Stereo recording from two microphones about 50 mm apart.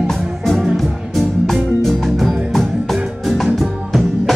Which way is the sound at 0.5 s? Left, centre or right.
Centre.